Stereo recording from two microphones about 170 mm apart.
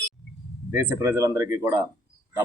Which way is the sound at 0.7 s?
10° right (ahead or behind).